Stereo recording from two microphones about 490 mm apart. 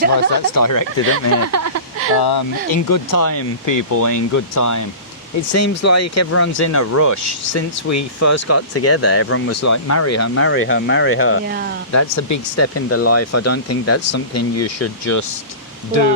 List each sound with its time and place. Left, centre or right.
0.5 s speech: left
1.1 s speech: right
2.1 s speech: left
11.4 s speech: centre
11.9 s speech: left